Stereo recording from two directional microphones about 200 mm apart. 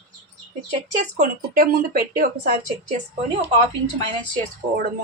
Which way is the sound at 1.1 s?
45° right (ahead or behind).